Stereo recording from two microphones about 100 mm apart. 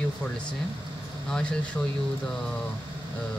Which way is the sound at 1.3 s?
10° left (ahead or behind).